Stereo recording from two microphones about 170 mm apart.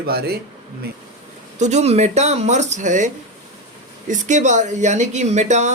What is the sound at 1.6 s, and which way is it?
Speech, 40° right (ahead or behind).